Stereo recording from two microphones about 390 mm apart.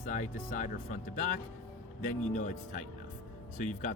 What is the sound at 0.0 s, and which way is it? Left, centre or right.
Speech, centre.